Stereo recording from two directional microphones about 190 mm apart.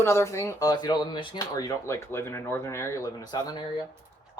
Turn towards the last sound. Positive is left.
turn(degrees=20)  # may be behind; listen again after turning